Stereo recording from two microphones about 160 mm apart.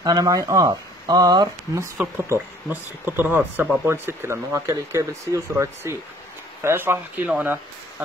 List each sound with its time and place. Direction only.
0.0 s speech: 25° right (ahead or behind)
2.0 s speech: 10° right (ahead or behind)